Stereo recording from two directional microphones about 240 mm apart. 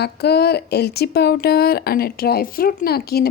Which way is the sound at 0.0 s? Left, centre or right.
Left.